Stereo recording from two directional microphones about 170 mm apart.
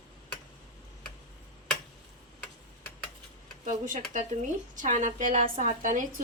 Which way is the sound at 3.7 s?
50° right (ahead or behind).